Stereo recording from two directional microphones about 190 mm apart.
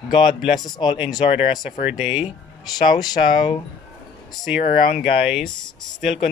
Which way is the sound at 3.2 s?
40° left (ahead or behind).